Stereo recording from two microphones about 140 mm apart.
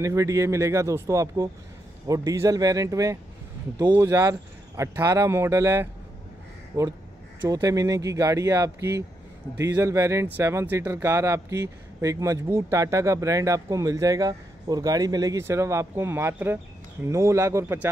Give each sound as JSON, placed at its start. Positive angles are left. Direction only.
{"t": 0.0, "sound": "speech", "side_deg": -20}